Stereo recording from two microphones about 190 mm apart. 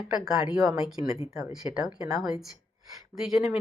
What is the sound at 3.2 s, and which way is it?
Speech, centre (ahead or behind).